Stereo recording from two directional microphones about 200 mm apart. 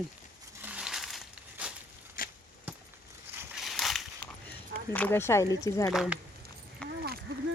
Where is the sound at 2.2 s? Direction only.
45° left (ahead or behind).